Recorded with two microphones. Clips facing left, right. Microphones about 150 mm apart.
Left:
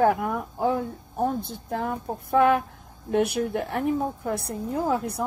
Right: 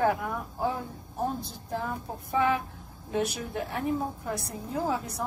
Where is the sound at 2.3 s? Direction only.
60° left (ahead or behind).